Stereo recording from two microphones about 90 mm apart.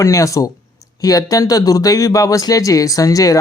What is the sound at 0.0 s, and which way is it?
Speech, 35° left (ahead or behind).